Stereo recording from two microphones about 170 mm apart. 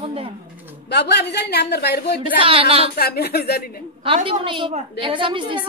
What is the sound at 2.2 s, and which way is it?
Speech, 30° right (ahead or behind).